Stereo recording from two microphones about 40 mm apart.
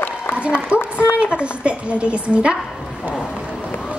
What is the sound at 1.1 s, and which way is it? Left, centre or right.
A woman's voice, right.